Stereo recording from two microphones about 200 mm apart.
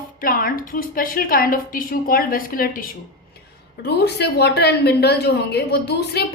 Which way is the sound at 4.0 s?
55° left (ahead or behind).